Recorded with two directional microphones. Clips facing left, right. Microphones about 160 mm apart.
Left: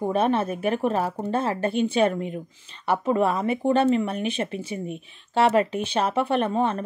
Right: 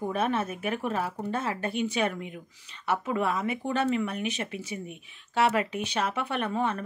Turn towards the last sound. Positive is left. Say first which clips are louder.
# left 6 dB
turn(degrees=30)  # may be behind; listen again after turning